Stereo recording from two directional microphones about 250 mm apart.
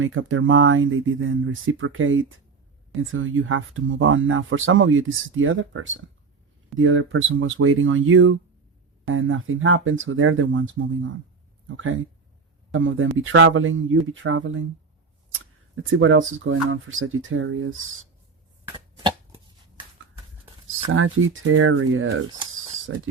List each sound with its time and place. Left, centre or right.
0.0 s speech: right
12.7 s speech: right
15.7 s speech: right
18.9 s shuffling cards: centre
21.5 s speech: right